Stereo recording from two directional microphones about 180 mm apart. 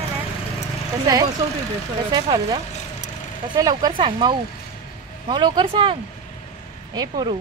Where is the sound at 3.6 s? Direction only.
20° right (ahead or behind).